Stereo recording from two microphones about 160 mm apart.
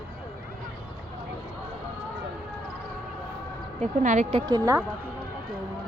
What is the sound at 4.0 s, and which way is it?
Speech, 50° right (ahead or behind).